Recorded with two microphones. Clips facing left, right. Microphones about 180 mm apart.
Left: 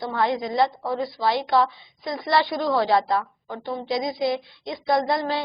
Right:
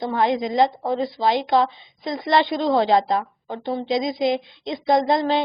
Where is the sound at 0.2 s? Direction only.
20° right (ahead or behind).